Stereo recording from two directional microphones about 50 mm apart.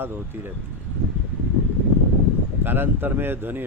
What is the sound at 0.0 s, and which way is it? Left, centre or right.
Speech, right.